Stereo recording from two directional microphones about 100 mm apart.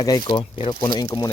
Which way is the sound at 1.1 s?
35° left (ahead or behind).